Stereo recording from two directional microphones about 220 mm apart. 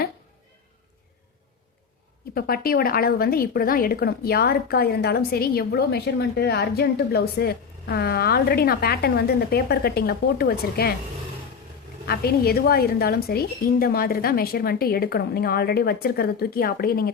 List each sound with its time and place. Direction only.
2.3 s a woman's voice: 40° left (ahead or behind)
12.0 s a woman's voice: 45° left (ahead or behind)